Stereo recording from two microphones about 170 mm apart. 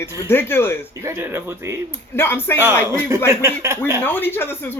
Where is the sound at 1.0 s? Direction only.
15° right (ahead or behind).